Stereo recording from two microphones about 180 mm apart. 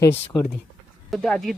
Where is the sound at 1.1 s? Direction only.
Centre (ahead or behind).